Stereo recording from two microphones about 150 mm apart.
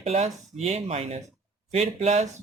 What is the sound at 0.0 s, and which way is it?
Speech, 45° right (ahead or behind).